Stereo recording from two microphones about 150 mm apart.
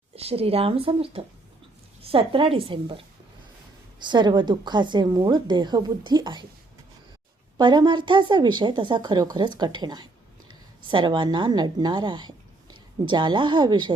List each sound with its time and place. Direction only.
0.2 s speech: 40° right (ahead or behind)
4.0 s a woman's voice: 30° right (ahead or behind)
7.6 s a woman's voice: 30° right (ahead or behind)